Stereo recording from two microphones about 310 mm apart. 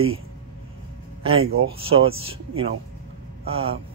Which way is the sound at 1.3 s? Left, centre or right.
Right.